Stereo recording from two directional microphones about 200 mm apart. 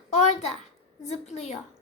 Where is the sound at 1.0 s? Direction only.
35° left (ahead or behind).